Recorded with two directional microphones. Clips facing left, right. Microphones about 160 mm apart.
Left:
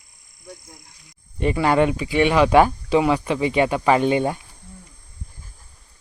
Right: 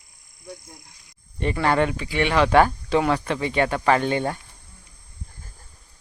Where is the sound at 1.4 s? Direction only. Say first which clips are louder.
Left 3 dB; 10° left (ahead or behind).